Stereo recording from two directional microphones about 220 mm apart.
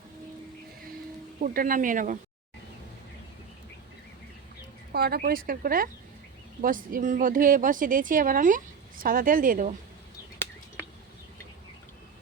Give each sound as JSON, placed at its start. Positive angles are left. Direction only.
{"t": 1.4, "sound": "speech", "side_deg": -40}
{"t": 4.9, "sound": "speech", "side_deg": -45}